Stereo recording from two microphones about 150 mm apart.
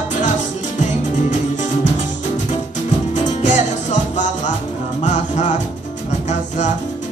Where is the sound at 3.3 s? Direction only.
55° left (ahead or behind).